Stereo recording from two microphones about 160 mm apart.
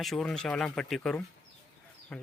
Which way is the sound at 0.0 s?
Centre (ahead or behind).